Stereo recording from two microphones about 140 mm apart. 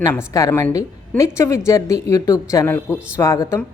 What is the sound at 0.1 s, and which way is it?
A woman's voice, 20° left (ahead or behind).